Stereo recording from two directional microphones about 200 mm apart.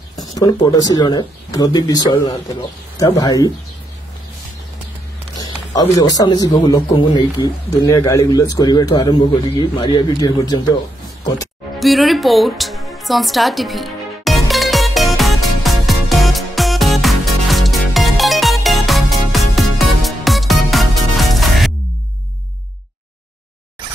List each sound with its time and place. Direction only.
0.1 s speech: 20° left (ahead or behind)
5.9 s a man's voice: 20° left (ahead or behind)
11.8 s music: centre (ahead or behind)